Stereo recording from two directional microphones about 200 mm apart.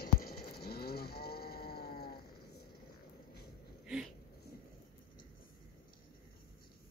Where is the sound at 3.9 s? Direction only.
5° right (ahead or behind).